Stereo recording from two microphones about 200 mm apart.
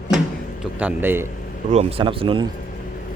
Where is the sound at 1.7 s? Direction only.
25° right (ahead or behind).